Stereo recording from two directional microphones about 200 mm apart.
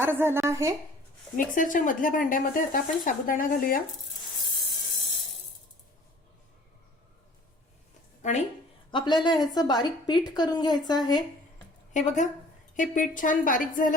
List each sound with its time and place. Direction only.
0.0 s a woman's voice: 10° right (ahead or behind)
1.4 s speech: 40° left (ahead or behind)
8.2 s speech: 35° left (ahead or behind)
8.9 s a woman's voice: 25° left (ahead or behind)
11.9 s speech: 35° left (ahead or behind)